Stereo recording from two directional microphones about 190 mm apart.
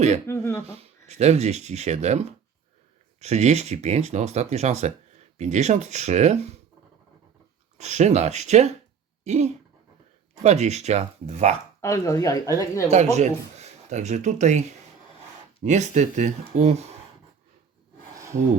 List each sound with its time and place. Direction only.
0.3 s speech: 15° left (ahead or behind)
0.8 s speech: 35° right (ahead or behind)
7.8 s speech: 35° right (ahead or behind)
11.8 s speech: 15° left (ahead or behind)
12.9 s speech: 35° right (ahead or behind)
15.6 s speech: 40° right (ahead or behind)